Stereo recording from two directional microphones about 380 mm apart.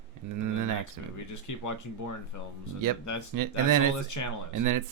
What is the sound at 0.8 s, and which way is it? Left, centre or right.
Speech, left.